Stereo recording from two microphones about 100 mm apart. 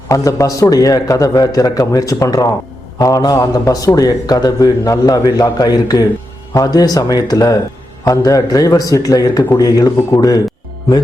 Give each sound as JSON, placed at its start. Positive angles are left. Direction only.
{"t": 0.1, "sound": "a man's voice", "side_deg": 35}